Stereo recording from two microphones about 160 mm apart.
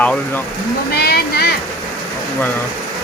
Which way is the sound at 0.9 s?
85° left.